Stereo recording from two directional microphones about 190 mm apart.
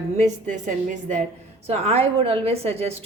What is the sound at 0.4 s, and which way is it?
A woman's voice, 40° right (ahead or behind).